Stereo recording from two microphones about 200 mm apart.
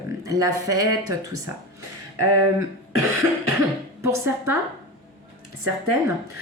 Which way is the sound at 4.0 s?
15° right (ahead or behind).